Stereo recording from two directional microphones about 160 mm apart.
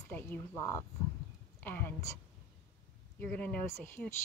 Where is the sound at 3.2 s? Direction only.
10° left (ahead or behind).